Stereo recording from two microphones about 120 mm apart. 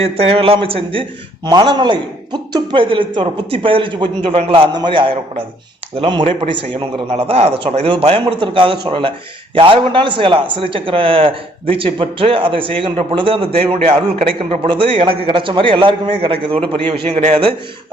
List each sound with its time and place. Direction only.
0.0 s a man's voice: 55° right (ahead or behind)
1.5 s a man's voice: 35° right (ahead or behind); by 14.3 s 65° right (ahead or behind)
14.3 s a man's voice: 50° right (ahead or behind)